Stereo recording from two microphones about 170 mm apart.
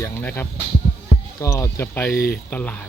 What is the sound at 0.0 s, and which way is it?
Speech, 10° left (ahead or behind).